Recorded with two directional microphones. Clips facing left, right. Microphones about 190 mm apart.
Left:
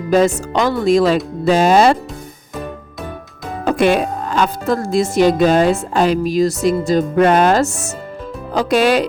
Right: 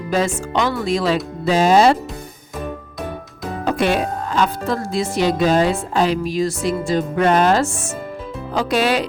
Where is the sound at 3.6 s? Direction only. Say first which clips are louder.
Left 4 dB; 55° left (ahead or behind).